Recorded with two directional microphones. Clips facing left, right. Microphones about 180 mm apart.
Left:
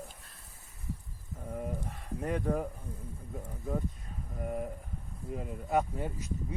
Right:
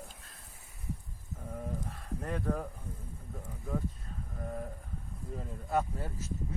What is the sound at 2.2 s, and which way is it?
Speech, 10° left (ahead or behind).